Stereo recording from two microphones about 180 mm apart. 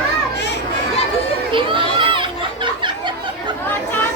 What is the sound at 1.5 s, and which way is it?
Crowd, 30° right (ahead or behind).